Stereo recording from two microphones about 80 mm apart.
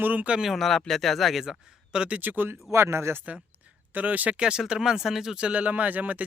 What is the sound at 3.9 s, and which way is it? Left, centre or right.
Speech, centre.